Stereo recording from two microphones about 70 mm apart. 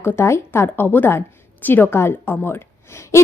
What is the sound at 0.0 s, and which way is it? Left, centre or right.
Speech, left.